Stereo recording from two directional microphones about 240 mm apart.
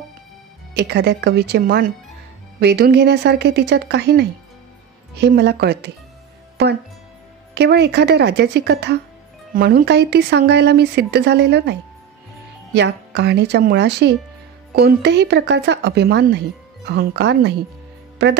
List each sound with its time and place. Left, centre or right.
0.7 s speech: right
7.5 s speech: right
12.7 s speech: right